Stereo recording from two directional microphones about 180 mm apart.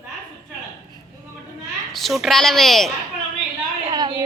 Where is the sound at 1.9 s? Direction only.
Centre (ahead or behind).